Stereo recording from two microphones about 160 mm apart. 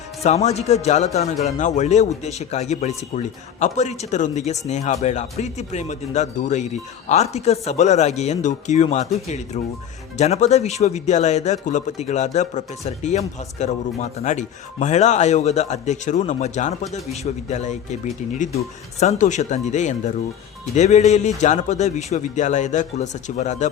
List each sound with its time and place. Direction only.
0.2 s speech: 45° left (ahead or behind)